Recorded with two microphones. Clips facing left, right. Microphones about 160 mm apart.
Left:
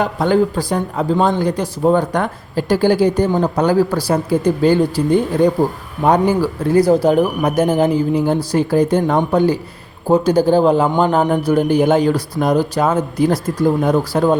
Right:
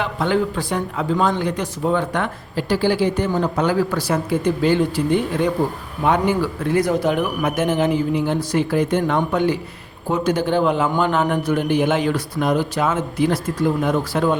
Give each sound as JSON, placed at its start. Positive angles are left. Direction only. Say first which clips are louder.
{"t": 0.0, "sound": "speech", "louder": "left 5 dB", "side_deg": 40}